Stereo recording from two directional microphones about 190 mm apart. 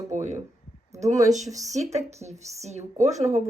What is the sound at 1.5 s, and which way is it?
Speech, 40° right (ahead or behind).